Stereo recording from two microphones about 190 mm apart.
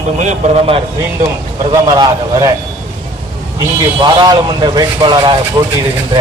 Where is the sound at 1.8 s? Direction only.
20° right (ahead or behind).